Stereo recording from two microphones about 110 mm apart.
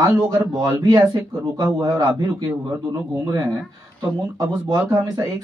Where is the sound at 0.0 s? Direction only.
35° right (ahead or behind).